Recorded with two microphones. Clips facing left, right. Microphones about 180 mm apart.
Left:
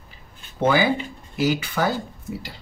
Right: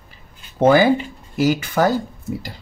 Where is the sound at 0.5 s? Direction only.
45° right (ahead or behind).